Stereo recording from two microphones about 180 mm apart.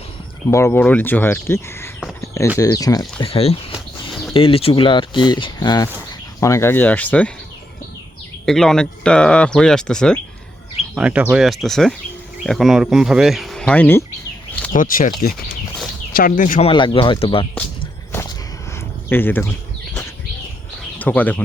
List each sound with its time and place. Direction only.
0.5 s speech: 15° left (ahead or behind)
2.2 s a sound: 15° left (ahead or behind)
2.6 s speech: 20° left (ahead or behind)
3.7 s a sound: centre (ahead or behind)
4.4 s speech: 30° left (ahead or behind); by 7.3 s 10° left (ahead or behind)
8.4 s speech: centre (ahead or behind)
10.9 s speech: 5° right (ahead or behind); by 14.0 s 10° left (ahead or behind)
14.7 s speech: 45° left (ahead or behind)
16.6 s speech: 30° left (ahead or behind)
19.0 s a sound: 10° left (ahead or behind)
21.0 s speech: 10° left (ahead or behind)